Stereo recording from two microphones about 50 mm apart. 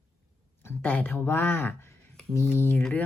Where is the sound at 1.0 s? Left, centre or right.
Left.